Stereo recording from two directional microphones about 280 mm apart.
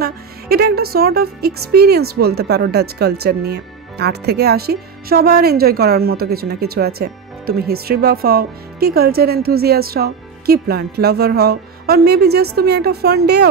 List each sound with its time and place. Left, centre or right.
0.0 s speech: right